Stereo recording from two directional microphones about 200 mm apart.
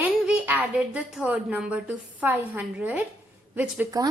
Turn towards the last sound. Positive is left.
turn(degrees=-15)  # may be behind; listen again after turning